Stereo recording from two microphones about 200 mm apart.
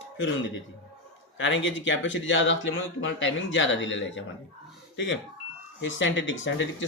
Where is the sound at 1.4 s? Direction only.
65° left (ahead or behind).